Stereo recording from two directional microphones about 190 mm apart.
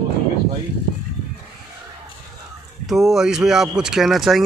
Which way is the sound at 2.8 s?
Centre (ahead or behind).